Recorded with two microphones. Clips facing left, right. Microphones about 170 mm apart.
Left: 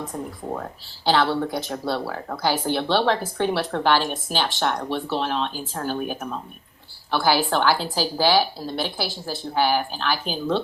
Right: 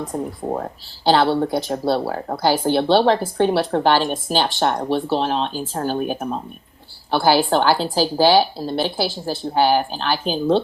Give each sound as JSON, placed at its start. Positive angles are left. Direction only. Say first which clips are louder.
{"t": 0.1, "sound": "speech", "louder": "right 6 dB", "side_deg": -35}